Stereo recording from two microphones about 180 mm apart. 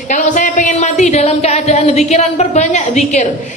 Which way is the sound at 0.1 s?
45° left (ahead or behind).